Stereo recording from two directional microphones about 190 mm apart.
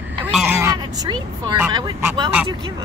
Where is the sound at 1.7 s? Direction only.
20° right (ahead or behind).